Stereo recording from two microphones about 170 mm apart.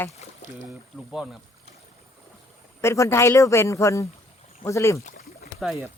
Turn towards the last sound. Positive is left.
turn(degrees=0)  # may be behind; listen again after turning